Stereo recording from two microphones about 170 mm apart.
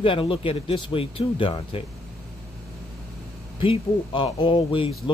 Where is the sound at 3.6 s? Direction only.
30° left (ahead or behind).